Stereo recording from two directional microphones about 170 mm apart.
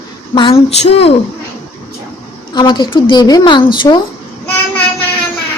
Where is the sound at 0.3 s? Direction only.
30° left (ahead or behind).